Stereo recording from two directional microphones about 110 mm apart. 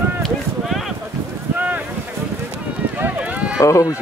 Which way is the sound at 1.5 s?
15° right (ahead or behind).